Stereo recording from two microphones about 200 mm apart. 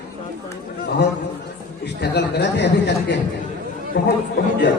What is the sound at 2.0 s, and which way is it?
A man's voice, 55° left (ahead or behind).